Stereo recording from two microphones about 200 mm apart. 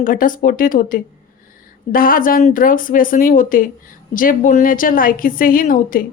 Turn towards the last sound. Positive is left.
turn(degrees=45)  # may be behind; listen again after turning